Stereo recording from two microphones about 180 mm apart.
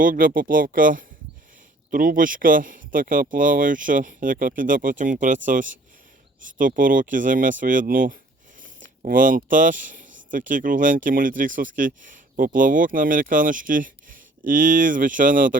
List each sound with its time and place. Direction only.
0.0 s speech: 50° right (ahead or behind)